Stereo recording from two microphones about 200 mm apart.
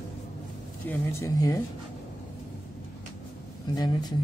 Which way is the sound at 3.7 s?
20° left (ahead or behind).